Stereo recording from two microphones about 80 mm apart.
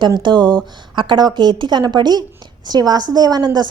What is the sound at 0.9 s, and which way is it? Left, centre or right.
Speech, right.